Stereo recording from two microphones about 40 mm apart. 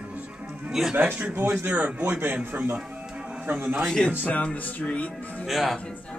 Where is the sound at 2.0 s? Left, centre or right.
Right.